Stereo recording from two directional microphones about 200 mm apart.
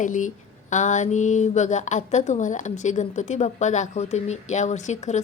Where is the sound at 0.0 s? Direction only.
40° left (ahead or behind).